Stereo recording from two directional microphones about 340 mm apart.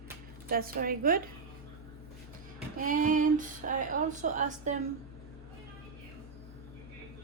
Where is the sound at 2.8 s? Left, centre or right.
Right.